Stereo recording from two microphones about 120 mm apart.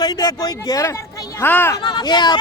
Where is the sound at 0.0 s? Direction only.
30° left (ahead or behind).